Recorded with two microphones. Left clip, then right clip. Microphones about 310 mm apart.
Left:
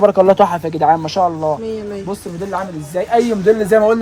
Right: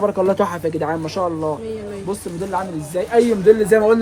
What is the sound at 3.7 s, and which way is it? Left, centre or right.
Speech, centre.